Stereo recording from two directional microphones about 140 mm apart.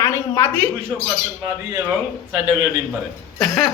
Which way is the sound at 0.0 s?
20° left (ahead or behind).